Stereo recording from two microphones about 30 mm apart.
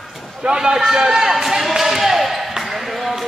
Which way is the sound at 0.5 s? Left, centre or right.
Right.